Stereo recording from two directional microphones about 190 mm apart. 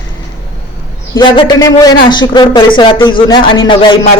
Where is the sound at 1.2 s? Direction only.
20° left (ahead or behind).